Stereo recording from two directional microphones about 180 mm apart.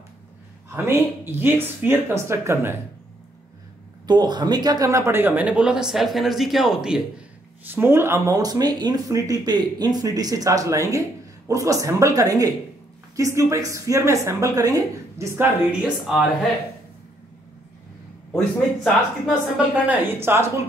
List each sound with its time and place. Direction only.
0.7 s a woman's voice: 10° right (ahead or behind)
4.1 s a woman's voice: 25° right (ahead or behind); by 16.3 s 5° right (ahead or behind)
19.2 s a woman's voice: 5° right (ahead or behind)